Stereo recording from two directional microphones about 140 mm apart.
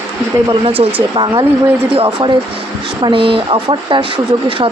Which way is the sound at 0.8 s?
40° right (ahead or behind).